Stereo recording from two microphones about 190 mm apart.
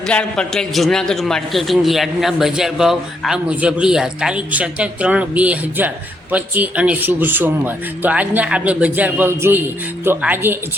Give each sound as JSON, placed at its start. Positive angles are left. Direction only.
{"t": 0.1, "sound": "a man's voice", "side_deg": 5}